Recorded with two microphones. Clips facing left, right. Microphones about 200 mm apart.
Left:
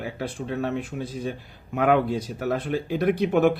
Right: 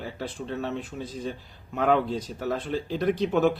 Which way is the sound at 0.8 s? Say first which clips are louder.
Left 3 dB; 10° left (ahead or behind).